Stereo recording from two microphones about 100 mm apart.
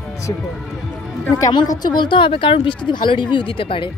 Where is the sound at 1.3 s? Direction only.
35° left (ahead or behind); by 3.9 s 60° left (ahead or behind).